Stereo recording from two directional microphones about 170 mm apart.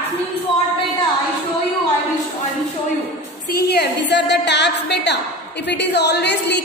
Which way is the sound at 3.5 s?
70° left (ahead or behind).